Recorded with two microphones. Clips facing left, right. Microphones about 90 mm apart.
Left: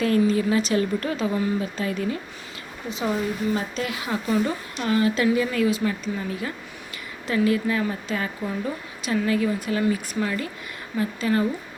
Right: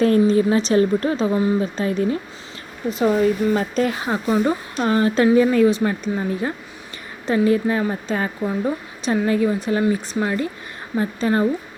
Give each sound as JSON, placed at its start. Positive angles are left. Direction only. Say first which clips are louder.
{"t": 0.0, "sound": "speech", "louder": "right 5 dB", "side_deg": -35}
{"t": 3.5, "sound": "a woman's voice", "louder": "right 7 dB", "side_deg": -45}